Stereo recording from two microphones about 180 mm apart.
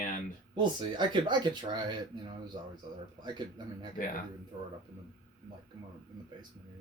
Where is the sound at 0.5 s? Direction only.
25° right (ahead or behind).